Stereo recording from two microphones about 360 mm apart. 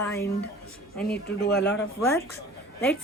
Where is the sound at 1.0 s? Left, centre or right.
Left.